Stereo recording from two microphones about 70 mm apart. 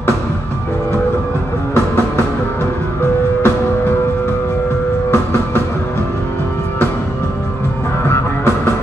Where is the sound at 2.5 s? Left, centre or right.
Left.